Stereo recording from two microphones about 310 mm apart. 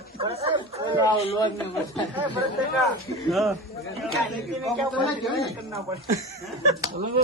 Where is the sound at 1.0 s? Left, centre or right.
Centre.